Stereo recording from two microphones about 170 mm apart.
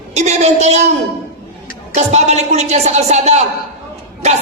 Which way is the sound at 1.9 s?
40° right (ahead or behind).